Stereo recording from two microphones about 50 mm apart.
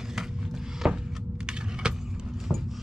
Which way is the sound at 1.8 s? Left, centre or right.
Centre.